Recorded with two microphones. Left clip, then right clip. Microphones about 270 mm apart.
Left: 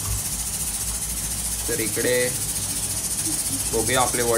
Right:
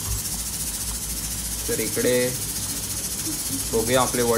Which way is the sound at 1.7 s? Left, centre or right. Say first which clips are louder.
Right 1 dB; centre.